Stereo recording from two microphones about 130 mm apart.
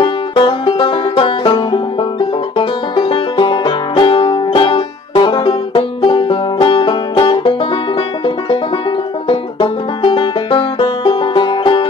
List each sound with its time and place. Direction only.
0.0 s music: 35° left (ahead or behind)
9.3 s music: 40° left (ahead or behind)